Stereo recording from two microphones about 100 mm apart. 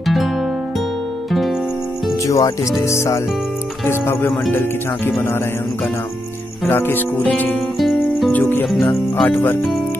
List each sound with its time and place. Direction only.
0.0 s music: centre (ahead or behind)
2.2 s speech: 30° left (ahead or behind)
6.7 s speech: 20° left (ahead or behind)
7.8 s music: centre (ahead or behind)
8.3 s music: 20° left (ahead or behind)
8.8 s speech: 15° left (ahead or behind)